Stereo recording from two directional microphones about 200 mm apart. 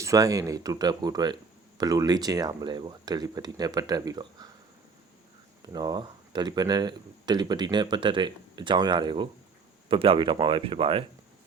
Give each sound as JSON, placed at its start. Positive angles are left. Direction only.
{"t": 0.0, "sound": "speech", "side_deg": -15}
{"t": 5.6, "sound": "speech", "side_deg": -20}